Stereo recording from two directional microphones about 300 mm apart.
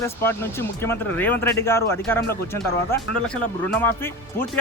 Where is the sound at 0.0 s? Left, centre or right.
Centre.